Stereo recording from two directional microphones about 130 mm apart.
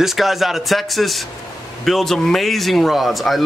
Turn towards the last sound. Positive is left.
turn(degrees=0)  # may be behind; listen again after turning